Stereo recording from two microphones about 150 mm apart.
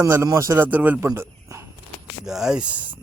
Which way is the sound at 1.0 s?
20° right (ahead or behind).